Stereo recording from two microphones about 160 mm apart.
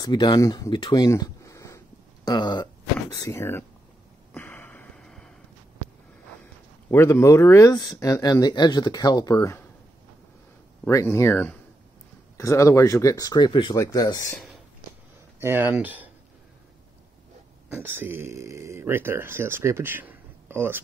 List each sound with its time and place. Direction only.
0.0 s speech: 25° left (ahead or behind)
3.3 s speech: 15° left (ahead or behind)
4.3 s a sound: 10° left (ahead or behind)
6.9 s speech: 15° left (ahead or behind)
10.9 s speech: 20° left (ahead or behind)
15.4 s speech: 10° right (ahead or behind)
17.7 s speech: 10° right (ahead or behind)